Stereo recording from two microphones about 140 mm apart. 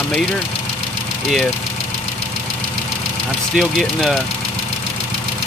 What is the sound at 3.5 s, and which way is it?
Speech, centre (ahead or behind).